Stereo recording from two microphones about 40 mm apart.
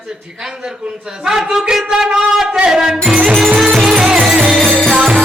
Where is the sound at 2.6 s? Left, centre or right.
Centre.